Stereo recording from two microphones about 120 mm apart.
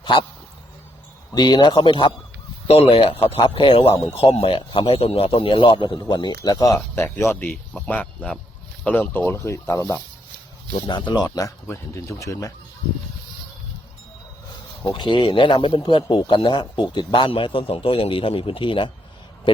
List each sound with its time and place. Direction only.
0.0 s speech: 40° left (ahead or behind)
1.3 s a man's voice: 35° left (ahead or behind)
2.6 s speech: 55° left (ahead or behind); by 10.0 s 20° left (ahead or behind)
10.8 s speech: 40° left (ahead or behind)
14.9 s speech: 40° left (ahead or behind)